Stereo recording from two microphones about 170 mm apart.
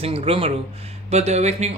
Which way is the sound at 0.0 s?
35° right (ahead or behind).